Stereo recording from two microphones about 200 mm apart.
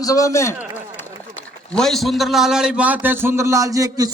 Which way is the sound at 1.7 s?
Centre (ahead or behind).